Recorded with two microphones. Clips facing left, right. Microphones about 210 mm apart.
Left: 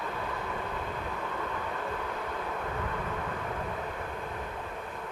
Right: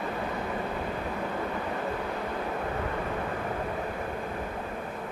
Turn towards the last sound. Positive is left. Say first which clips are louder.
# right 4 dB
turn(degrees=-40)  # may be behind; listen again after turning